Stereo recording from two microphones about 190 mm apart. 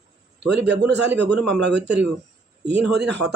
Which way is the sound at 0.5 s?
65° right (ahead or behind).